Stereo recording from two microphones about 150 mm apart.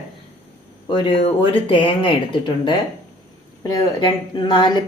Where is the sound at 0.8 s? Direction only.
35° left (ahead or behind).